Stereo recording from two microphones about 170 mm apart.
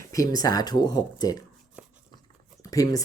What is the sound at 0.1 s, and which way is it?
Speech, 20° left (ahead or behind).